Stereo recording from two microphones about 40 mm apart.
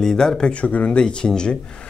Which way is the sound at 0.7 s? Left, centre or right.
Left.